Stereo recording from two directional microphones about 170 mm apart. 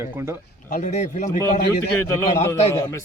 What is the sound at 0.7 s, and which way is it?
Speech, 45° left (ahead or behind).